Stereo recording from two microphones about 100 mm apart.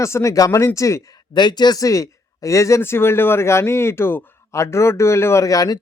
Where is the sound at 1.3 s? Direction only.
45° left (ahead or behind).